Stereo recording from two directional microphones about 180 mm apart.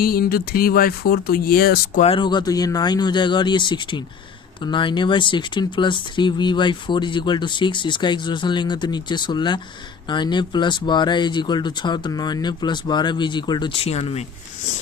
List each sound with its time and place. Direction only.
0.0 s speech: 55° left (ahead or behind)
2.0 s speech: 30° left (ahead or behind)